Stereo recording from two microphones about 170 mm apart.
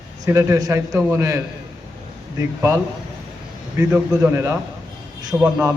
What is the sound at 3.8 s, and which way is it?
A man's voice, 15° right (ahead or behind).